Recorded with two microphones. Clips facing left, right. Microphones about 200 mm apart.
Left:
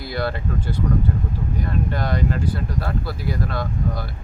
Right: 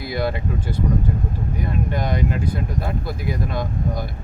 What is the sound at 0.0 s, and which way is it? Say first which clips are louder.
Speech: right 2 dB; 10° right (ahead or behind).